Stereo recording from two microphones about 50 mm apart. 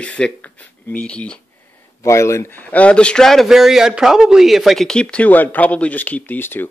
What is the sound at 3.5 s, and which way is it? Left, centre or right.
Speech, centre.